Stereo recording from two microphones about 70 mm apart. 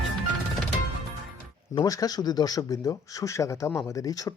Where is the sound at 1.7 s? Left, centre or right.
Left.